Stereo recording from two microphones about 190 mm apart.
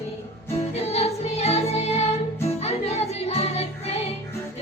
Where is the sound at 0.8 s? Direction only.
35° left (ahead or behind).